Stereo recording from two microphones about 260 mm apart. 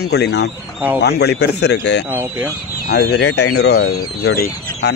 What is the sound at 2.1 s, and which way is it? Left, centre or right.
Speech, centre.